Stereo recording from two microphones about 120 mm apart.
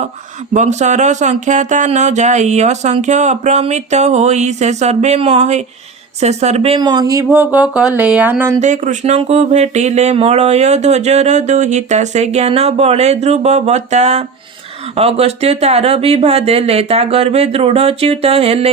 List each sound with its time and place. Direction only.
0.5 s speech: 75° right (ahead or behind); by 6.7 s 60° right (ahead or behind)
6.7 s speech: 35° right (ahead or behind)
7.3 s speech: 10° right (ahead or behind)
8.6 s speech: 90° right; by 14.3 s 65° right (ahead or behind)
14.9 s speech: 55° right (ahead or behind)